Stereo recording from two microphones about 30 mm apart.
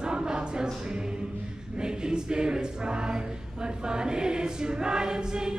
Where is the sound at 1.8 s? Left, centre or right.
Right.